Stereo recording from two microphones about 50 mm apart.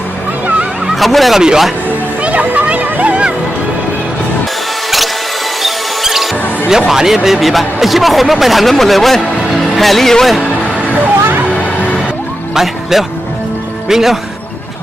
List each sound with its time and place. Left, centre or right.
0.9 s speech: centre
1.4 s speech: centre
2.2 s music: right
5.6 s mouse: centre
6.7 s a man's voice: centre
12.5 s speech: centre